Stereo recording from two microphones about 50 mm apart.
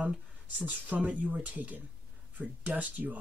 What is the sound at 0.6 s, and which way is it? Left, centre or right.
Speech, right.